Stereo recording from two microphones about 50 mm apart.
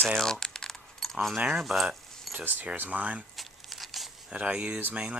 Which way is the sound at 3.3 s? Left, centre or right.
Centre.